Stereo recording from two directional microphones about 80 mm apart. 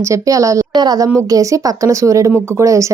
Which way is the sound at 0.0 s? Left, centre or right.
Right.